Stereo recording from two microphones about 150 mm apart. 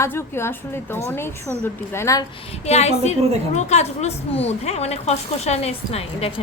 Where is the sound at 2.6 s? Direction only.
45° left (ahead or behind).